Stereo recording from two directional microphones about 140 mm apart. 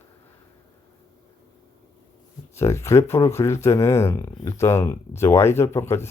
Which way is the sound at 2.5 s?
20° left (ahead or behind).